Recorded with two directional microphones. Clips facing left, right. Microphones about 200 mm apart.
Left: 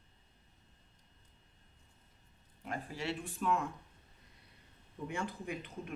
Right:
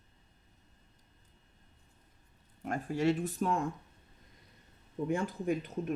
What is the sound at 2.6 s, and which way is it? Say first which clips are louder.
Speech: right 10 dB; 45° right (ahead or behind).